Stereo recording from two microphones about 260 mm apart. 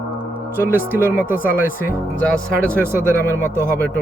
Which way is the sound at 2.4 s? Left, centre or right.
Centre.